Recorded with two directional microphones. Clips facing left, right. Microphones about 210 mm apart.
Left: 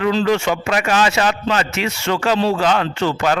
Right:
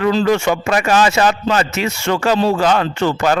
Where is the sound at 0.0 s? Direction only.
40° right (ahead or behind).